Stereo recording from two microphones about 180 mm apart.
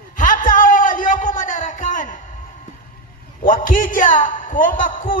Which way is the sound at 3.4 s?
50° left (ahead or behind).